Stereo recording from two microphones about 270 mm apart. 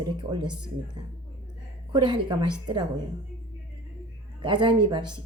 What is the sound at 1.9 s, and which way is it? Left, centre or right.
Speech, centre.